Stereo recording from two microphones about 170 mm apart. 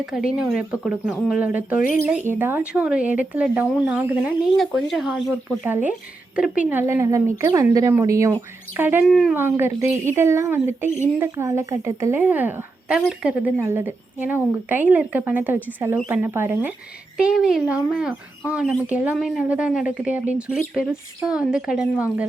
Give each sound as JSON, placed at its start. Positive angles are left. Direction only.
{"t": 0.0, "sound": "a woman's voice", "side_deg": -5}
{"t": 4.5, "sound": "a woman's voice", "side_deg": 0}
{"t": 9.0, "sound": "speech", "side_deg": 0}
{"t": 9.3, "sound": "a woman's voice", "side_deg": -15}